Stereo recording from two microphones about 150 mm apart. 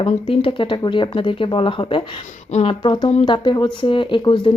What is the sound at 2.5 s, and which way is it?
Speech, 45° left (ahead or behind).